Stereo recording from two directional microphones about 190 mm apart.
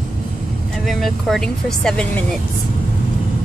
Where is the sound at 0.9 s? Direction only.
Centre (ahead or behind).